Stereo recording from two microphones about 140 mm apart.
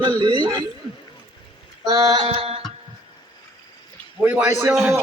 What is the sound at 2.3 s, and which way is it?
Music, 45° right (ahead or behind).